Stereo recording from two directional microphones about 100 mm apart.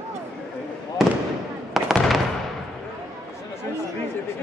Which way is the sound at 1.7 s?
Centre (ahead or behind).